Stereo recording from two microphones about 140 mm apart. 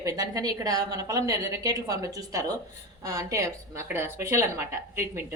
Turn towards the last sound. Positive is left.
turn(degrees=-15)  # may be behind; listen again after turning